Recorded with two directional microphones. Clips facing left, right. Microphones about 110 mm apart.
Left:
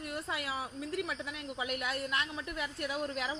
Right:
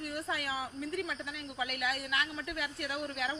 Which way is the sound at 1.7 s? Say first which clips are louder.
Left 2 dB; 30° left (ahead or behind).